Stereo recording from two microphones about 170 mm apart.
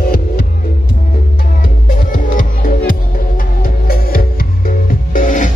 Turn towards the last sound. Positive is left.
turn(degrees=50)  # may be behind; listen again after turning